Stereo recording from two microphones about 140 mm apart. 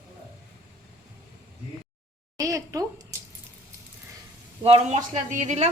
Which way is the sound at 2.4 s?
25° right (ahead or behind).